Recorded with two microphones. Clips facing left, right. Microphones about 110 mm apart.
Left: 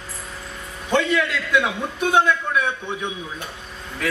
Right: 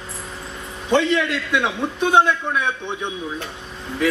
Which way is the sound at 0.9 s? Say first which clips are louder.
Right 1 dB; 25° right (ahead or behind).